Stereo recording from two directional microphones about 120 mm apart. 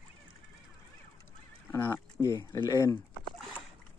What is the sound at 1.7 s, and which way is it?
Speech, 20° left (ahead or behind).